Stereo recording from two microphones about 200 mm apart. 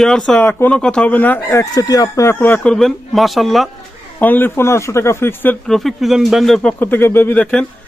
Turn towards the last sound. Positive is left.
turn(degrees=10)  # may be behind; listen again after turning